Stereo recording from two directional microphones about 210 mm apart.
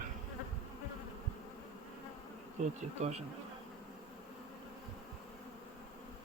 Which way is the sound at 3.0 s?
30° right (ahead or behind).